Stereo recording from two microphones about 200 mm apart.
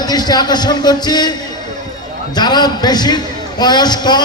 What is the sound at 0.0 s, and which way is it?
Speech, 20° left (ahead or behind).